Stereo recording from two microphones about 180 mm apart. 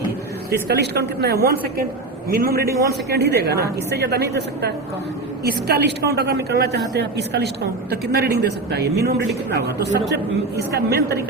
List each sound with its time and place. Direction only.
0.7 s a woman's voice: 65° right (ahead or behind)
2.6 s a man's voice: 15° right (ahead or behind)
3.1 s a woman's voice: 65° right (ahead or behind)
10.8 s a woman's voice: 65° right (ahead or behind)